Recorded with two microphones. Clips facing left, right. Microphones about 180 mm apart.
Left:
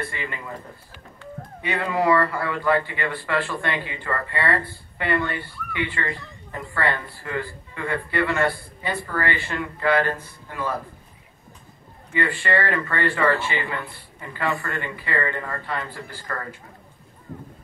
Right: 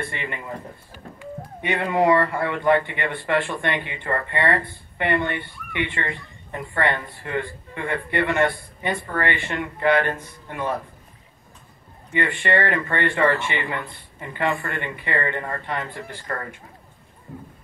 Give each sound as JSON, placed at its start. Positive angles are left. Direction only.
{"t": 0.0, "sound": "speech", "side_deg": -25}
{"t": 12.1, "sound": "a man's voice", "side_deg": -25}